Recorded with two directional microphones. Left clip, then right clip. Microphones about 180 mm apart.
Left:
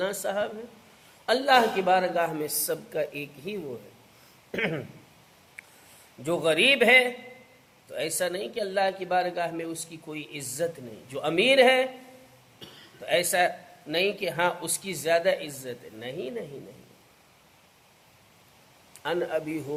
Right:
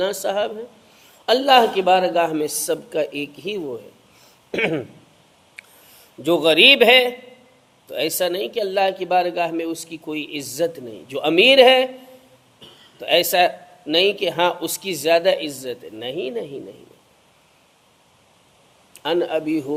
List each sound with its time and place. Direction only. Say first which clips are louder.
0.0 s a man's voice: right 7 dB; 35° right (ahead or behind)
6.2 s a man's voice: right 9 dB; 40° right (ahead or behind)
13.0 s a man's voice: right 8 dB; 40° right (ahead or behind)
19.0 s a man's voice: right 8 dB; 35° right (ahead or behind)